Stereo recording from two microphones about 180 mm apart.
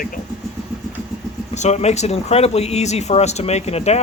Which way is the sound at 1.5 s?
40° left (ahead or behind).